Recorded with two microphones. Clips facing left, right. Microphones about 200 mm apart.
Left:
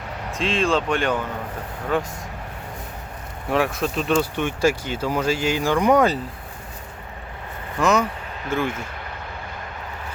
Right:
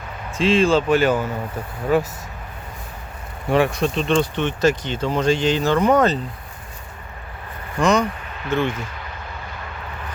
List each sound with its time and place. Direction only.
0.3 s speech: centre (ahead or behind)
3.5 s speech: centre (ahead or behind)
7.8 s speech: 5° left (ahead or behind)